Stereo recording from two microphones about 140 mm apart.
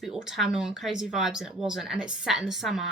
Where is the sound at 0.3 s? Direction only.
5° right (ahead or behind).